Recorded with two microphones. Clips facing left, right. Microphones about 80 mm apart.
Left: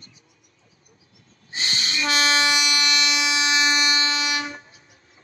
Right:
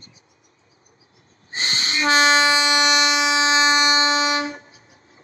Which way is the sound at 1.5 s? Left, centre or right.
Right.